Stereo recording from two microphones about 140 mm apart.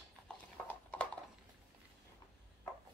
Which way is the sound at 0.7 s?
10° left (ahead or behind).